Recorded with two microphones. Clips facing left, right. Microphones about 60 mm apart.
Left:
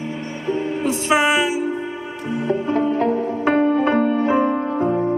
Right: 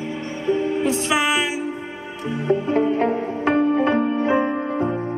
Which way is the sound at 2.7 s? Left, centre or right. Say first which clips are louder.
Left 2 dB; right.